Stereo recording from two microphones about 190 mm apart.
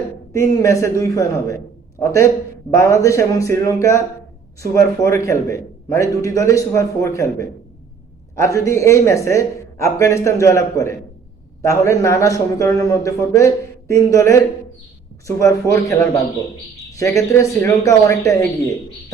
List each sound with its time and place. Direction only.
0.3 s a man's voice: 15° left (ahead or behind)
15.7 s a man's voice: 15° left (ahead or behind)